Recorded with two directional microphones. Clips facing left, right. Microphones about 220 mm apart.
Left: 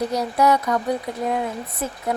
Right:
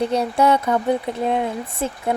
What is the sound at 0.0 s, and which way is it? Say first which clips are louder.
Speech: right 2 dB; 25° right (ahead or behind).